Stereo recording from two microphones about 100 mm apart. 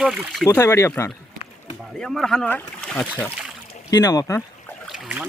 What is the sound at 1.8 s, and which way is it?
Speech, 5° left (ahead or behind).